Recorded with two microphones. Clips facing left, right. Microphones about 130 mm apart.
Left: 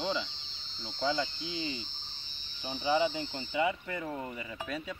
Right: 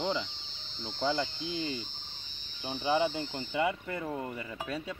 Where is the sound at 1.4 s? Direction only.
55° right (ahead or behind).